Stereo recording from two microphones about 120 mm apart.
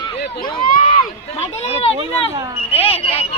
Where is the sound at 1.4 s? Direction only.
55° left (ahead or behind).